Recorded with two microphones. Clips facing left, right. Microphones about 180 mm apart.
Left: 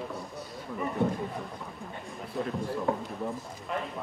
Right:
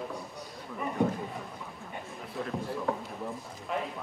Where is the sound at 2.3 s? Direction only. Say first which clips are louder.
Left 3 dB; centre (ahead or behind).